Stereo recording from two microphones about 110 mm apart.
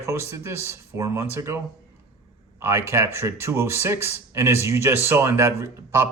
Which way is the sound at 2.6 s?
25° right (ahead or behind).